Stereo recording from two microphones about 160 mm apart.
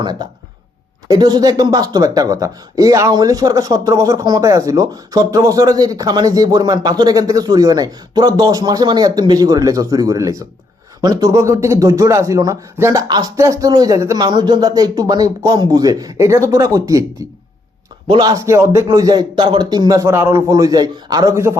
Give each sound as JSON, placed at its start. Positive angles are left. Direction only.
{"t": 0.0, "sound": "speech", "side_deg": -25}
{"t": 18.1, "sound": "speech", "side_deg": -25}